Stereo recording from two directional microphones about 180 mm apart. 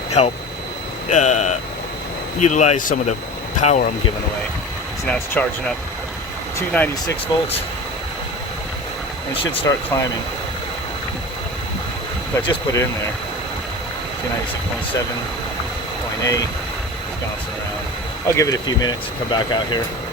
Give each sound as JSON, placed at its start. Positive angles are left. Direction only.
{"t": 0.2, "sound": "speech", "side_deg": 35}
{"t": 5.0, "sound": "speech", "side_deg": 5}
{"t": 6.6, "sound": "speech", "side_deg": 10}
{"t": 7.3, "sound": "speech", "side_deg": 25}
{"t": 9.3, "sound": "speech", "side_deg": 30}
{"t": 9.6, "sound": "speech", "side_deg": 15}
{"t": 12.5, "sound": "speech", "side_deg": 20}
{"t": 16.2, "sound": "speech", "side_deg": 20}
{"t": 18.3, "sound": "speech", "side_deg": 20}